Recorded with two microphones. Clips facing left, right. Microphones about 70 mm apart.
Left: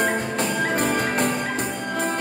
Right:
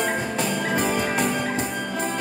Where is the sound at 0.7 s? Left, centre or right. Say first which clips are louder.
Right 1 dB; left.